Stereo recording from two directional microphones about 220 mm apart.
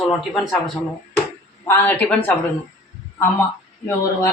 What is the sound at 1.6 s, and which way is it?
Speech, 10° left (ahead or behind).